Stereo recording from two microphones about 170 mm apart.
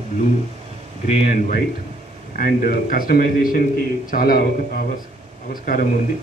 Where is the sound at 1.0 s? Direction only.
40° left (ahead or behind).